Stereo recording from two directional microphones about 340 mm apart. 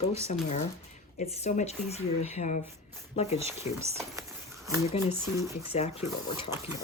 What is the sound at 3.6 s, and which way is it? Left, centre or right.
Speech, left.